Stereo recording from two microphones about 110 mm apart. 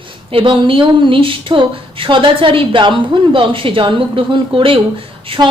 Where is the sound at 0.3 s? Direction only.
50° right (ahead or behind).